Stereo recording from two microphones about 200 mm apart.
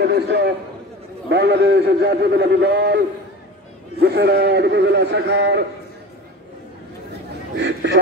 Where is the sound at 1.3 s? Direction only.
55° right (ahead or behind).